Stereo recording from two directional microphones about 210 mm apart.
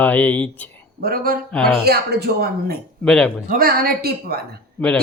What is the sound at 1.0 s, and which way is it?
Speech, 45° right (ahead or behind).